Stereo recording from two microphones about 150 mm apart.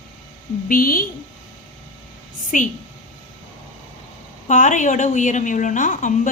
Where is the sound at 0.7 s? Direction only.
70° left (ahead or behind).